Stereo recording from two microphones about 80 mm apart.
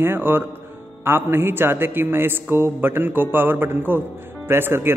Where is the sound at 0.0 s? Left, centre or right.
Right.